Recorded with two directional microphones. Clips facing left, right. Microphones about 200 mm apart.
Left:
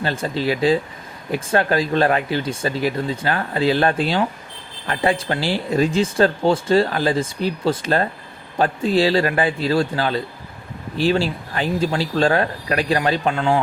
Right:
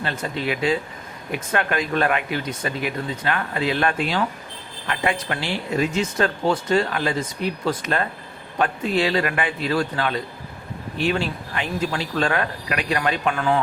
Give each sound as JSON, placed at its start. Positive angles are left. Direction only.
{"t": 0.0, "sound": "speech", "side_deg": 35}